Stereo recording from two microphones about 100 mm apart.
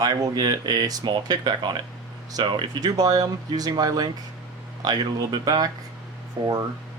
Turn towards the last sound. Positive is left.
turn(degrees=-40)  # may be behind; listen again after turning